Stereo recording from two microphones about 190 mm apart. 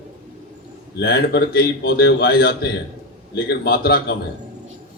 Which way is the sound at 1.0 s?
55° left (ahead or behind).